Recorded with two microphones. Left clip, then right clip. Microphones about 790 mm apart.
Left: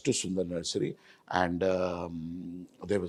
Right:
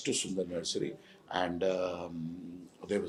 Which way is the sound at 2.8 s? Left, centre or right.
Left.